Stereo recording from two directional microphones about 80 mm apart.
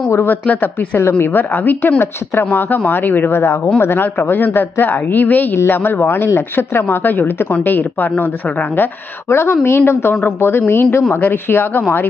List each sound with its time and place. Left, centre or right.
0.1 s a woman's voice: left